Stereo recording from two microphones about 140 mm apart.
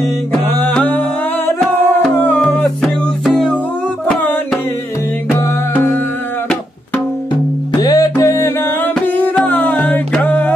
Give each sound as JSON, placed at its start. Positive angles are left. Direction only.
{"t": 0.3, "sound": "music", "side_deg": 15}
{"t": 5.3, "sound": "music", "side_deg": 20}
{"t": 7.8, "sound": "music", "side_deg": 25}